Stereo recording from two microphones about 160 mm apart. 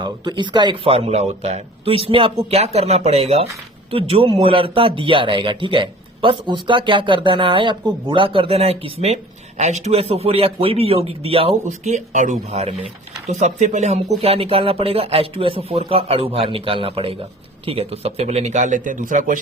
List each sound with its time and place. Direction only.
0.0 s speech: 30° right (ahead or behind); by 19.4 s 55° right (ahead or behind)